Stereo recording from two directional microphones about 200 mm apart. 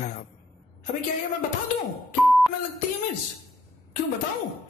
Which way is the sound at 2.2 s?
Centre (ahead or behind).